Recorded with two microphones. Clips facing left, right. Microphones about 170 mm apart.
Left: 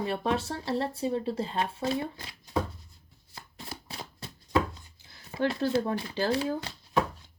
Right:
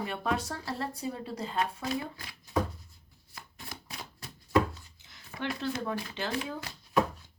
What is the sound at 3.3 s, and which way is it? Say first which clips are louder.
Shuffling cards: left 3 dB; 30° left (ahead or behind).